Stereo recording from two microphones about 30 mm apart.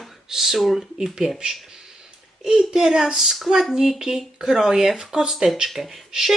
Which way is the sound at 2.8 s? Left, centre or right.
Centre.